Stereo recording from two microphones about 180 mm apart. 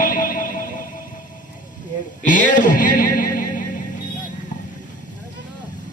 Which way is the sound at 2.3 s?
45° left (ahead or behind).